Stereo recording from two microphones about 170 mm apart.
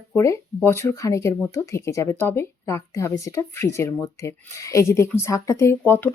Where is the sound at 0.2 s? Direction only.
15° left (ahead or behind).